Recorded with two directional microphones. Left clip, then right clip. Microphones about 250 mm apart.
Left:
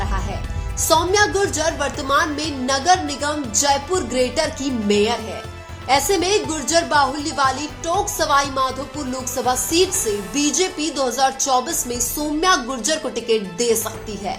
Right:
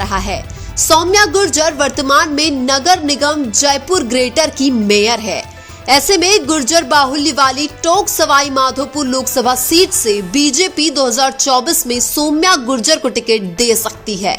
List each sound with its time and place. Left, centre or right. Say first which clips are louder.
0.9 s a woman's voice: right 6 dB; right